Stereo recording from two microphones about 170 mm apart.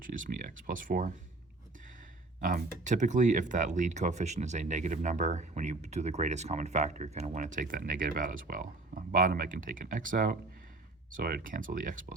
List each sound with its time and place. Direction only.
0.0 s speech: 50° right (ahead or behind)
2.4 s speech: 50° right (ahead or behind)